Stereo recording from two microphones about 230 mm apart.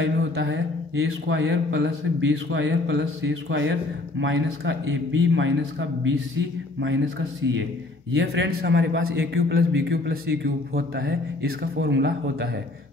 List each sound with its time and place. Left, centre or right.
0.0 s speech: right
8.1 s speech: right
11.8 s speech: right